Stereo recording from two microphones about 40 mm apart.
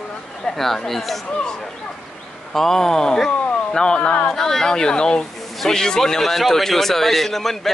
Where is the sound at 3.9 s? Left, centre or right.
Left.